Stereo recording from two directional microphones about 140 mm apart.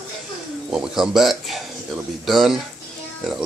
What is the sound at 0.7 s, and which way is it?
Speech, 5° right (ahead or behind).